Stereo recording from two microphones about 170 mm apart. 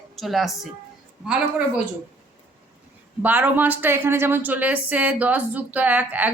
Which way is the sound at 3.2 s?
10° right (ahead or behind).